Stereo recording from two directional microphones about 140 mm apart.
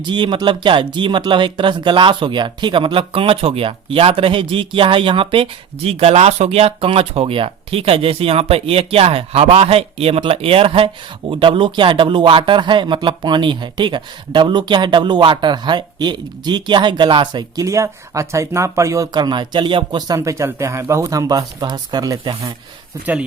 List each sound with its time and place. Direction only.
0.0 s speech: 35° right (ahead or behind)